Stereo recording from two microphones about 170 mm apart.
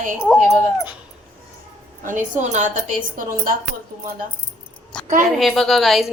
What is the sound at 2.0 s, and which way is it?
A woman's voice, 50° right (ahead or behind).